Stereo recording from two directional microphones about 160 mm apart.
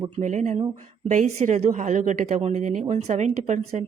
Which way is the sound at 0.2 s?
50° right (ahead or behind).